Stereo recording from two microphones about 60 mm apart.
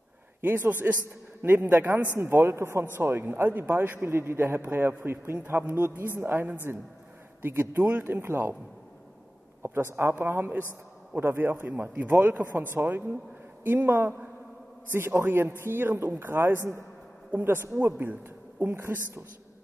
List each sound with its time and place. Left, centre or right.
0.4 s speech: right
2.1 s speech: right
9.6 s a sound: right
9.9 s speech: right
18.8 s a woman's voice: right